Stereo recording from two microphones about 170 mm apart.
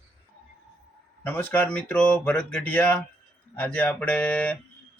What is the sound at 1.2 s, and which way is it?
Speech, 10° left (ahead or behind).